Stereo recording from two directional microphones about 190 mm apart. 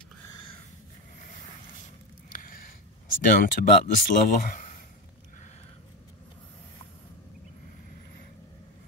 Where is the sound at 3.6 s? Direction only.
45° left (ahead or behind).